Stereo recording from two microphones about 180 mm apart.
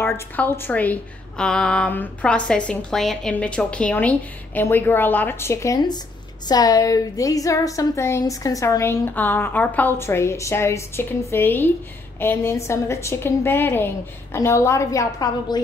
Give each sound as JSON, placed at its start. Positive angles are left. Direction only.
{"t": 0.0, "sound": "a woman's voice", "side_deg": 10}